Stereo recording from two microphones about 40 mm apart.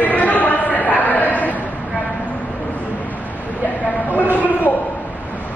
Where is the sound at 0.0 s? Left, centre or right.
Left.